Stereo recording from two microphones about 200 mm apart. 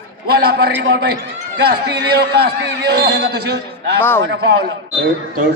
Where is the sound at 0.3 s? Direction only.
50° right (ahead or behind).